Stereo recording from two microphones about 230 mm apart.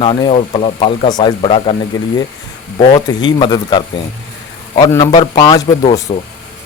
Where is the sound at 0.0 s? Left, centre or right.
Left.